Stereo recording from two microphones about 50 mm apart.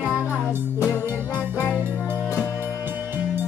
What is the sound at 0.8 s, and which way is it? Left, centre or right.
Music, right.